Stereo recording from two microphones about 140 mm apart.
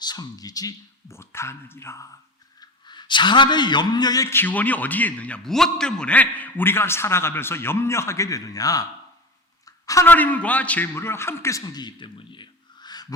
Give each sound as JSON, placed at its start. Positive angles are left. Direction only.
{"t": 0.0, "sound": "speech", "side_deg": 30}
{"t": 2.6, "sound": "a man's voice", "side_deg": 30}